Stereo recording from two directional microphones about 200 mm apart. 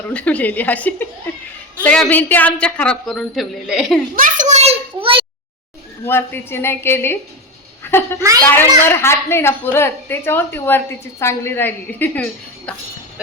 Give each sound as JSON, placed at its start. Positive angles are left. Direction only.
{"t": 0.1, "sound": "a woman's voice", "side_deg": 5}
{"t": 4.1, "sound": "a sound", "side_deg": -40}
{"t": 6.1, "sound": "a woman's voice", "side_deg": 10}